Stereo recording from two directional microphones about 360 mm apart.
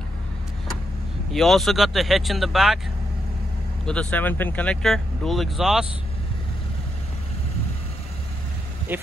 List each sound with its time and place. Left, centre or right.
1.3 s speech: centre
3.8 s speech: centre
8.9 s speech: centre